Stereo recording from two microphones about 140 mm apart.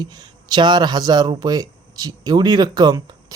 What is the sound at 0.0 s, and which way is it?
Speech, 30° right (ahead or behind).